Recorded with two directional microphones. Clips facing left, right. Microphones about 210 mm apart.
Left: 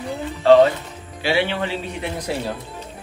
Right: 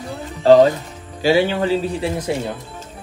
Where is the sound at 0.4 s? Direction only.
40° right (ahead or behind).